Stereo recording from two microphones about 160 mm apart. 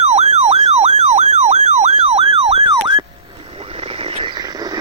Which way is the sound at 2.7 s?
25° right (ahead or behind).